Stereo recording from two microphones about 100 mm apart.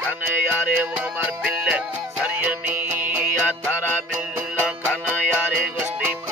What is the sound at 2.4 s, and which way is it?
Music, 15° right (ahead or behind).